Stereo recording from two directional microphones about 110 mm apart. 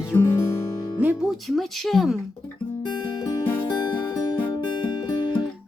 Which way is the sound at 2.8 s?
40° left (ahead or behind).